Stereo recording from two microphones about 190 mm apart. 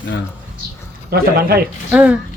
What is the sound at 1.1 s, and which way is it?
Speech, 55° right (ahead or behind).